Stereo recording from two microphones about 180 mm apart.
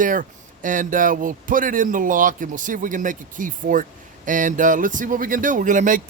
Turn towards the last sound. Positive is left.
turn(degrees=-45)  # may be behind; listen again after turning